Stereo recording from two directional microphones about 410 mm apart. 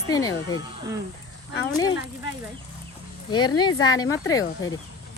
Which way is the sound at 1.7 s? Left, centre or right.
Centre.